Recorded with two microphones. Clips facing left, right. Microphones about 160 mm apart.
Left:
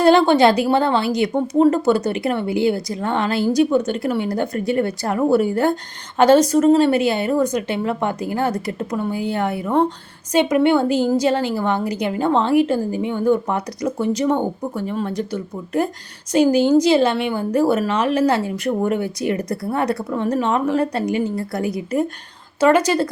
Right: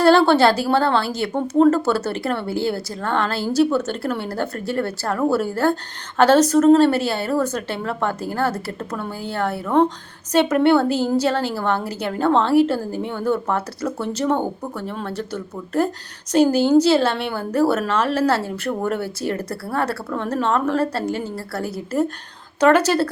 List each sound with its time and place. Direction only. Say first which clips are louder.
0.1 s a woman's voice: left 2 dB; 15° left (ahead or behind)